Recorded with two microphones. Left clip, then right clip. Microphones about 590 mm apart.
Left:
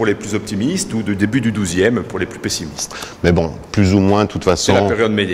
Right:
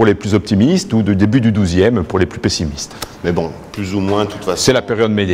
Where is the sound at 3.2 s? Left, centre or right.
Left.